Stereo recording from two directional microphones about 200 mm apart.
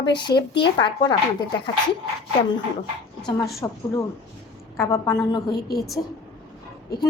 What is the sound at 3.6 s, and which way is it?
Speech, 15° left (ahead or behind).